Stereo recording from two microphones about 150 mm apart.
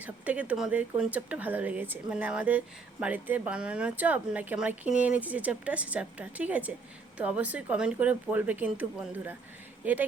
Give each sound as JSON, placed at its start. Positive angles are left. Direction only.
{"t": 0.0, "sound": "speech", "side_deg": -10}